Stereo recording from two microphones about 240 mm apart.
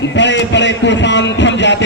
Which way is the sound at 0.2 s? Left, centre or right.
Left.